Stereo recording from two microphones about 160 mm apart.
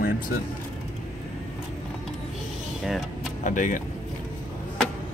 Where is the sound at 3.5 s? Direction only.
55° left (ahead or behind).